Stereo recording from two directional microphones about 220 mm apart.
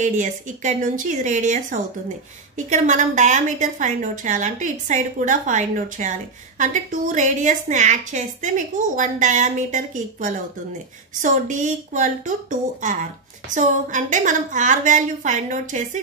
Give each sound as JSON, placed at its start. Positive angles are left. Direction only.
{"t": 0.0, "sound": "a woman's voice", "side_deg": -35}